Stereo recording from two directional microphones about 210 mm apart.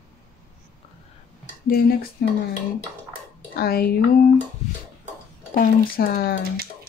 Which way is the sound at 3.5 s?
45° left (ahead or behind).